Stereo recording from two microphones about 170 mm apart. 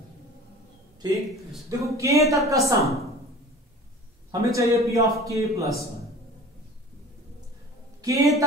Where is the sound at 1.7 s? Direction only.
15° right (ahead or behind).